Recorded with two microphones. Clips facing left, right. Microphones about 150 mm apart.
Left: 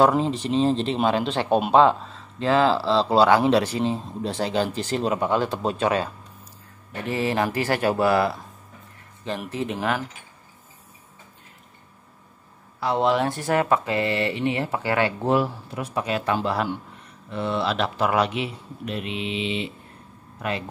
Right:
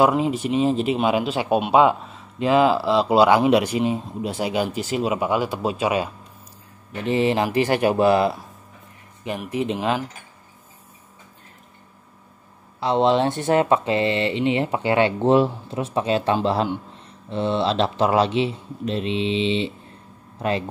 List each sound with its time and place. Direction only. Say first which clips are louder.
0.0 s speech: right 1 dB; 10° right (ahead or behind)
9.5 s speech: right 4 dB; 15° right (ahead or behind)
12.8 s speech: right 3 dB; 25° right (ahead or behind)